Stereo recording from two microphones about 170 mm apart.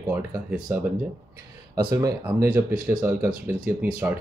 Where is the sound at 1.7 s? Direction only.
20° right (ahead or behind).